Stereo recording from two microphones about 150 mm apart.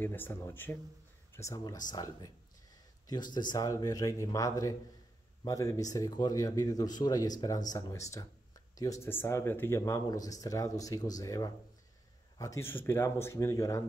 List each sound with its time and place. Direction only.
0.0 s speech: 15° left (ahead or behind)
3.5 s speech: 25° left (ahead or behind)